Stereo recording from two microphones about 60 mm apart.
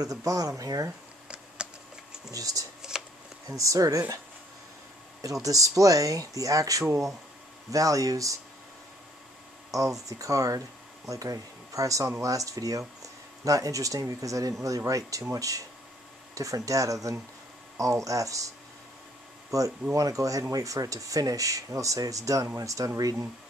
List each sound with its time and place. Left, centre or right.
0.0 s speech: right
2.3 s speech: right
2.8 s shuffling cards: centre
3.4 s speech: right
5.2 s speech: right
9.7 s speech: right
19.5 s speech: right